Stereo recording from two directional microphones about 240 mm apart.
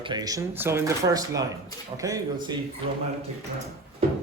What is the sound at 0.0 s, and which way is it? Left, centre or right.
Speech, centre.